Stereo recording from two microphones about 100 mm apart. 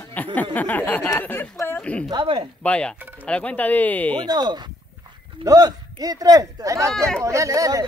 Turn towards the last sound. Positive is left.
turn(degrees=-35)  # may be behind; listen again after turning